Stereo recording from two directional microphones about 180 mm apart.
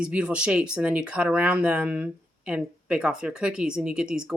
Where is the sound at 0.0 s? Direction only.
5° right (ahead or behind).